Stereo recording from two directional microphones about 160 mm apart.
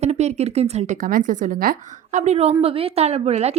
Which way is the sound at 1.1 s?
55° right (ahead or behind).